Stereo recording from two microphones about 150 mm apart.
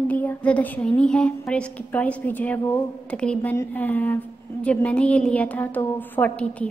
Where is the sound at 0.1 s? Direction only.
10° left (ahead or behind).